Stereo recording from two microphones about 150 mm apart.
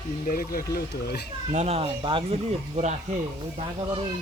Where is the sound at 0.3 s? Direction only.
75° left (ahead or behind).